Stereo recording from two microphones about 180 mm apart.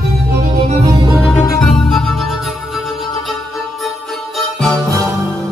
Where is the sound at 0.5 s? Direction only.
35° right (ahead or behind).